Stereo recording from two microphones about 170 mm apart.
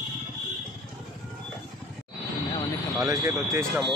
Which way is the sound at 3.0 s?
15° right (ahead or behind).